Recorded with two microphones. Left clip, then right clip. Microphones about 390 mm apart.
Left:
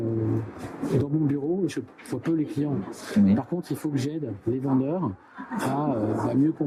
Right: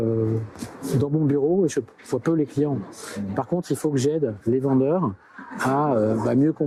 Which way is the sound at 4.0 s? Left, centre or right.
Left.